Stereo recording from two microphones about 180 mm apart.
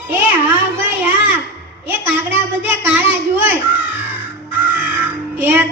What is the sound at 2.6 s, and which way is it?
Child singing, 10° right (ahead or behind).